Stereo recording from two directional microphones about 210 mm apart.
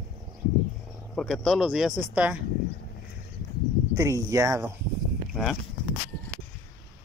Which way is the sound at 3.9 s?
15° right (ahead or behind).